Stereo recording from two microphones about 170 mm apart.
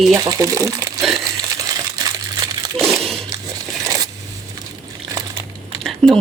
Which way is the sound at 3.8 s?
20° right (ahead or behind).